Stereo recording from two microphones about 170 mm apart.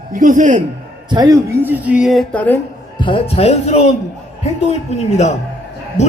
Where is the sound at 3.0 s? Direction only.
35° left (ahead or behind).